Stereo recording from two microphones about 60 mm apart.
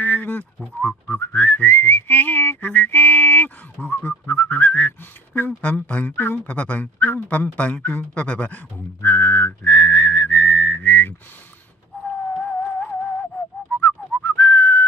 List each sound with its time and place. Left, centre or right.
0.0 s frog: left
0.7 s whistling: left
9.0 s whistling: left
12.4 s music: left
13.7 s whistling: left